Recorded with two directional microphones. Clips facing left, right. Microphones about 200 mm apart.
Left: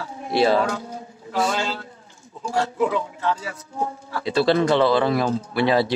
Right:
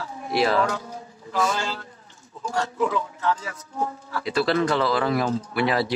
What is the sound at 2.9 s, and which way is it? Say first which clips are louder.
Speech: left 1 dB; 30° left (ahead or behind).